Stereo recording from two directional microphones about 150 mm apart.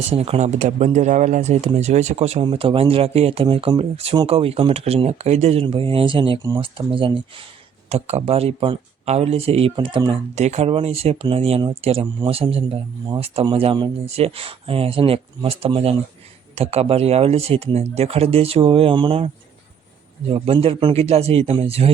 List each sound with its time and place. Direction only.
0.1 s speech: 45° right (ahead or behind)
10.3 s speech: 45° right (ahead or behind)
20.3 s speech: 40° right (ahead or behind)